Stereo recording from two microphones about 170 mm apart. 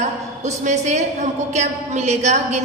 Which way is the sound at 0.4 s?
45° right (ahead or behind).